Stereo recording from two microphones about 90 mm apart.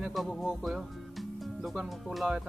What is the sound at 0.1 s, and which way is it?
Speech, centre (ahead or behind).